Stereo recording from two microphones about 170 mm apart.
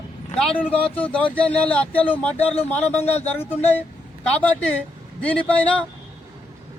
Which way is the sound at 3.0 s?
40° left (ahead or behind).